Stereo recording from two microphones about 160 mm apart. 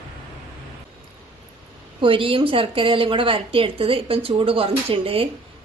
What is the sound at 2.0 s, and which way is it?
A woman's voice, 35° right (ahead or behind).